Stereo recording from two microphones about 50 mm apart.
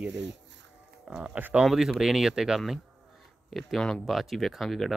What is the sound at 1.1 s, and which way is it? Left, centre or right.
Speech, right.